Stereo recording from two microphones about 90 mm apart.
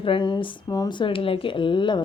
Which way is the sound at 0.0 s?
65° left (ahead or behind).